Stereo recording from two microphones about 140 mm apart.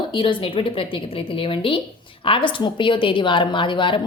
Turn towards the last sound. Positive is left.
turn(degrees=35)  # may be behind; listen again after turning